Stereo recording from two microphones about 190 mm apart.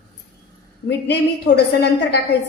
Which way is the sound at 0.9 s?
60° left (ahead or behind).